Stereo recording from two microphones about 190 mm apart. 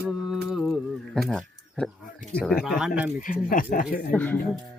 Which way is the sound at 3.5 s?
45° left (ahead or behind).